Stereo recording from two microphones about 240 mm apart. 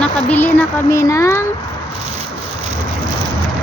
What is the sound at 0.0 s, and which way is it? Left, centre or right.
Speech, centre.